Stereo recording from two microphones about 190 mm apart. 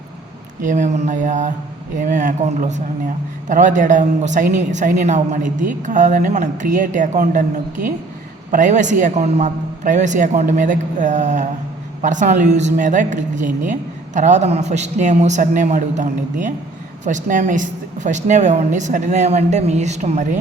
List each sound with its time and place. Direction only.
0.6 s a woman's voice: 40° right (ahead or behind)